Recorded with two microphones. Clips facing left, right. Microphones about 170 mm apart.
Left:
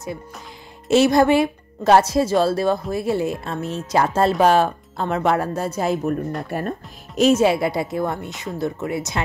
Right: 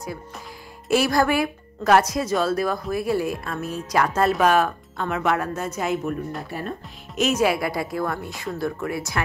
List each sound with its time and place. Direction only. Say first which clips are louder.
0.8 s speech: left 5 dB; 25° left (ahead or behind)
7.2 s speech: left 5 dB; 30° left (ahead or behind)